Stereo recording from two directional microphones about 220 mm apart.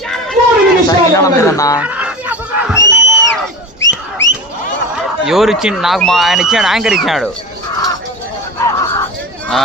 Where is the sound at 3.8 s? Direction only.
55° left (ahead or behind).